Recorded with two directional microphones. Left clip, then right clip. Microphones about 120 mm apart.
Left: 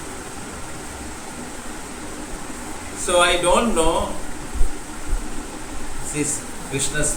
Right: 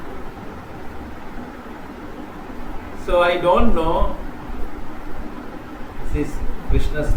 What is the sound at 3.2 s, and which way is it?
Speech, 15° left (ahead or behind).